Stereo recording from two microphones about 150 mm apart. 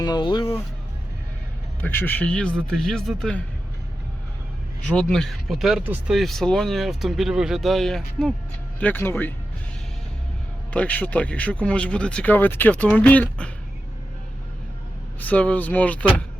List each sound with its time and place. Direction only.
0.0 s speech: 30° left (ahead or behind)
1.8 s speech: 15° left (ahead or behind)
4.9 s speech: 5° left (ahead or behind)
8.8 s speech: 15° left (ahead or behind)
10.7 s speech: 10° left (ahead or behind)
15.2 s speech: 10° left (ahead or behind)